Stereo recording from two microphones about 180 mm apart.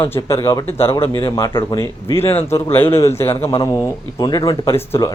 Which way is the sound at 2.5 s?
30° left (ahead or behind).